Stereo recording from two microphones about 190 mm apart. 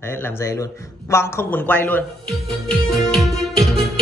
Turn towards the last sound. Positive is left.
turn(degrees=0)  # may be behind; listen again after turning